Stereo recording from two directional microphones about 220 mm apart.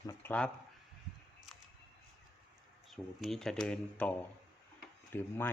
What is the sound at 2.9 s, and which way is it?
Speech, centre (ahead or behind).